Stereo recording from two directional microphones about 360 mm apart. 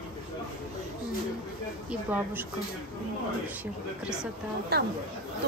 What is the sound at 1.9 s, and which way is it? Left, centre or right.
Speech, centre.